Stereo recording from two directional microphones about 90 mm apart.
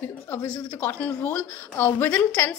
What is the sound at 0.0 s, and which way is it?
A woman's voice, 25° left (ahead or behind).